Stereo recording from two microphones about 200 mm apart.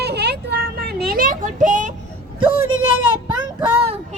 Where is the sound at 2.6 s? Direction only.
90° right.